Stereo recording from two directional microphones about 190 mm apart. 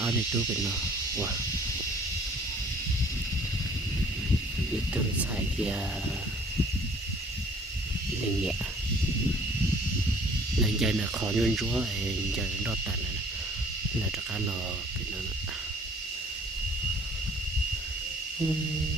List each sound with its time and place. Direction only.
10.6 s cricket: centre (ahead or behind)